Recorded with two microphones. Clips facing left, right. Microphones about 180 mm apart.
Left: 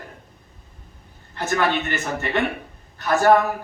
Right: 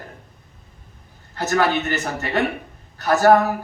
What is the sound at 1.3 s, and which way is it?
Speech, 40° right (ahead or behind).